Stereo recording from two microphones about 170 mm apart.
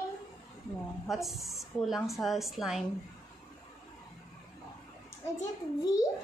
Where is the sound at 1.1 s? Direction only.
Centre (ahead or behind).